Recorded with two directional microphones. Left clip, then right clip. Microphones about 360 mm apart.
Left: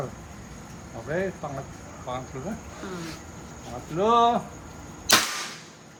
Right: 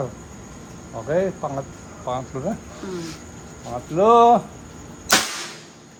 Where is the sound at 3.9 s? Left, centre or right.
Centre.